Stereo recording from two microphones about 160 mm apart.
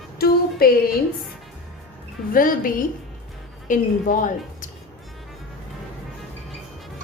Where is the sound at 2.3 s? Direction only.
60° left (ahead or behind).